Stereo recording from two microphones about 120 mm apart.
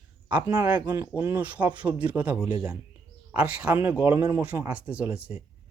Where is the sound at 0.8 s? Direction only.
30° right (ahead or behind).